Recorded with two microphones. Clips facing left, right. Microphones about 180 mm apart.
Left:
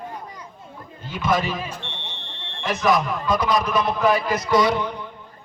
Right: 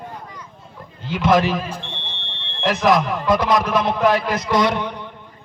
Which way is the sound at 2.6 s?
90° right.